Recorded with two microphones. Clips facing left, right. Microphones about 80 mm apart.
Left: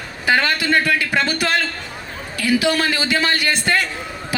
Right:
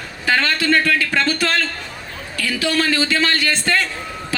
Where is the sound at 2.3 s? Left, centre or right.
Centre.